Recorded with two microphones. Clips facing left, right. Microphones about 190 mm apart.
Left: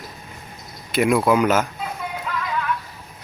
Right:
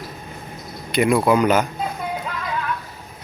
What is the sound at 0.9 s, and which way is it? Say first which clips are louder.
Speech: right 1 dB; centre (ahead or behind).